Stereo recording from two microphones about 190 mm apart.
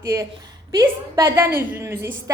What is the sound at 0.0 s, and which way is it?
A woman's voice, 15° right (ahead or behind).